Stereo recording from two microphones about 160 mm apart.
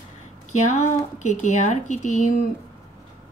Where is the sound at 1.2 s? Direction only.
50° left (ahead or behind).